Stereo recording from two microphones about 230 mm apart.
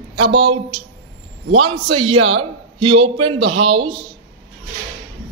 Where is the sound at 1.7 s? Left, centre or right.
Right.